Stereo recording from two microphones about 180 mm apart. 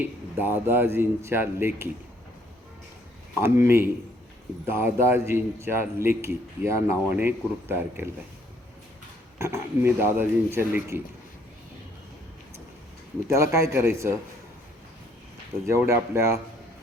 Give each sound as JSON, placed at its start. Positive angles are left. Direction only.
{"t": 0.0, "sound": "a man's voice", "side_deg": -10}
{"t": 3.4, "sound": "a man's voice", "side_deg": -15}
{"t": 9.4, "sound": "a man's voice", "side_deg": -15}
{"t": 13.2, "sound": "a man's voice", "side_deg": -15}
{"t": 15.6, "sound": "a man's voice", "side_deg": -15}